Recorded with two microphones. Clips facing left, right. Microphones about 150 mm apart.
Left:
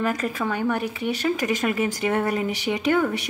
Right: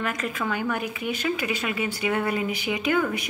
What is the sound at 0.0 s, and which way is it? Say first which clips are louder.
Speech: left 4 dB; 35° left (ahead or behind).